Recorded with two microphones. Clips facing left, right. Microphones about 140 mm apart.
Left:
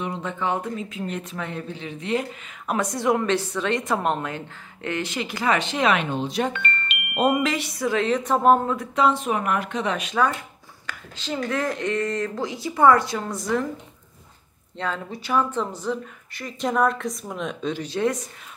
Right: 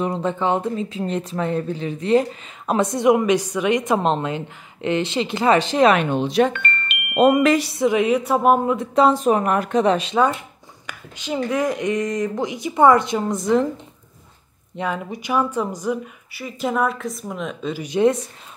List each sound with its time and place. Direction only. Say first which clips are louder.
0.0 s speech: right 6 dB; 35° right (ahead or behind)
6.0 s speech: right 7 dB; 75° right (ahead or behind)
6.5 s chime: right 2 dB; 55° right (ahead or behind)
7.2 s speech: right 6 dB; 80° right
7.4 s speech: right 8 dB; 40° right (ahead or behind)
7.7 s speech: right 5 dB; 20° right (ahead or behind)
8.7 s speech: right 5 dB; 35° right (ahead or behind)
14.8 s speech: right 4 dB; 15° right (ahead or behind)
17.8 s speech: right 8 dB; 20° right (ahead or behind)